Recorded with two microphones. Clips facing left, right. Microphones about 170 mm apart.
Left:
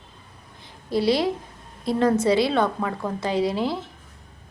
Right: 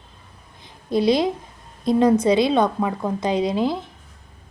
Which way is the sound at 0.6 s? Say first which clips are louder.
Right 3 dB; 20° right (ahead or behind).